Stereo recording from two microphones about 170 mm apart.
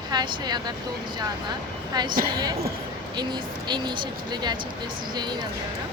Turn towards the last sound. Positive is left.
turn(degrees=-25)  # may be behind; listen again after turning